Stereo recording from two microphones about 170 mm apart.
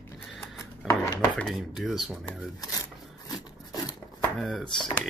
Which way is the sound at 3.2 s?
25° left (ahead or behind).